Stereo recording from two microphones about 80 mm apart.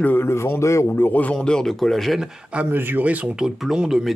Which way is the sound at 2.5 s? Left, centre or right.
Right.